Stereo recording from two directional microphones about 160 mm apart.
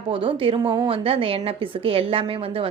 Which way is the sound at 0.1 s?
35° right (ahead or behind).